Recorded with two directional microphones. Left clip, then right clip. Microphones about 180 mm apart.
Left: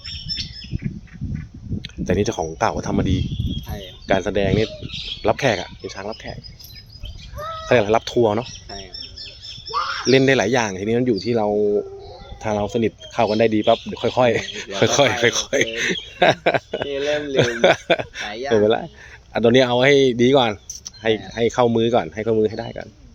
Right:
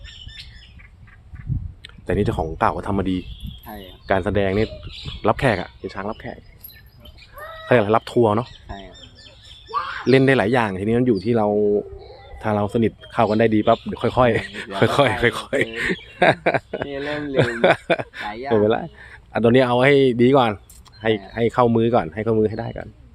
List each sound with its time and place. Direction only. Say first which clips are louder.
1.8 s speech: left 2 dB; 10° right (ahead or behind)
7.7 s speech: even; 20° right (ahead or behind)
10.0 s speech: even; 20° right (ahead or behind)
18.3 s speech: even; 60° right (ahead or behind)
18.5 s speech: left 1 dB; 15° right (ahead or behind)